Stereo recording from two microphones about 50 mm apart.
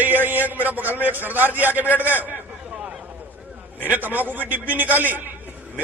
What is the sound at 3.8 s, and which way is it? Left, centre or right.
A man's voice, right.